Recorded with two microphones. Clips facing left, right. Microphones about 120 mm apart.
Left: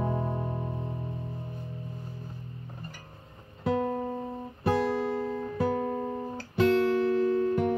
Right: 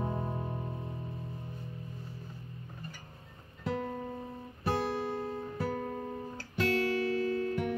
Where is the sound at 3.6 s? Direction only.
60° left (ahead or behind).